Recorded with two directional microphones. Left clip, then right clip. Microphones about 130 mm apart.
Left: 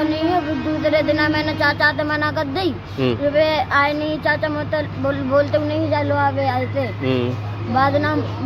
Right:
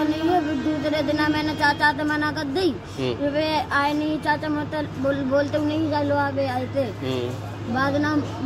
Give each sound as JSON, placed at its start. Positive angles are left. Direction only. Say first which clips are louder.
{"t": 0.8, "sound": "speech", "louder": "left 7 dB", "side_deg": 15}
{"t": 7.7, "sound": "speech", "louder": "left 5 dB", "side_deg": 20}